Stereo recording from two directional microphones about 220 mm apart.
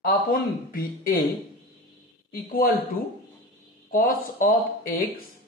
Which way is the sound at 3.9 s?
40° left (ahead or behind).